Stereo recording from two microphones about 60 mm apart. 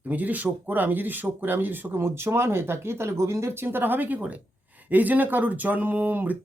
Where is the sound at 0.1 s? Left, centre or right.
Right.